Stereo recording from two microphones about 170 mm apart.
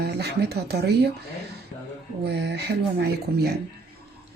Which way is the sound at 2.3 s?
80° right.